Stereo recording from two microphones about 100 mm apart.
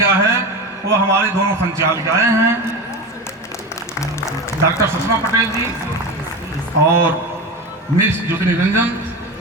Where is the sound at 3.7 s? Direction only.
30° left (ahead or behind).